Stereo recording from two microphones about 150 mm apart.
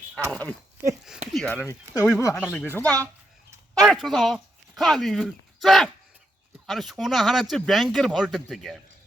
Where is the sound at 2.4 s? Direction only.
15° left (ahead or behind).